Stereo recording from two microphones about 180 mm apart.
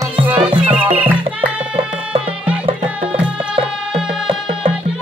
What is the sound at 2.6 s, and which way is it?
Music, 30° right (ahead or behind).